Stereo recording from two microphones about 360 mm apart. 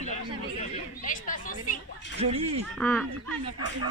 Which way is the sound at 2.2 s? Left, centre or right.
Centre.